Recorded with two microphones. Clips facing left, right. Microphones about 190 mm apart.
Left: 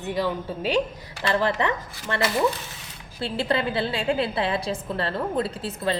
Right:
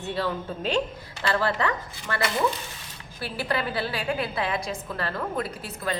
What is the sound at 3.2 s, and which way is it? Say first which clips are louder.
A woman's voice: left 4 dB; 25° left (ahead or behind).